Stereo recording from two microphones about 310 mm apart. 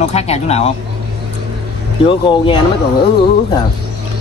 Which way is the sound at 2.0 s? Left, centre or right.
Centre.